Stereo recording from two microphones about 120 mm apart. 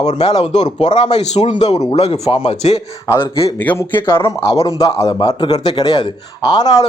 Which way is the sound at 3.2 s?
50° left (ahead or behind).